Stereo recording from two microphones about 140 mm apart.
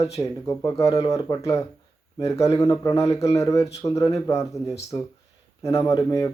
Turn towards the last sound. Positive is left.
turn(degrees=20)  # may be behind; listen again after turning